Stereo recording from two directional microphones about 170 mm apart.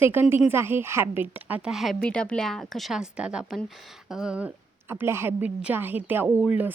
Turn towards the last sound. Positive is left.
turn(degrees=-10)  # may be behind; listen again after turning